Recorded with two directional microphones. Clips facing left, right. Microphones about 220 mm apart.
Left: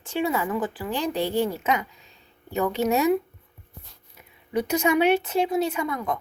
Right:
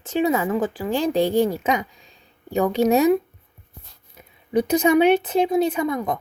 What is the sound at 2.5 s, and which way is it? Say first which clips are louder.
Speech: right 5 dB; 15° right (ahead or behind).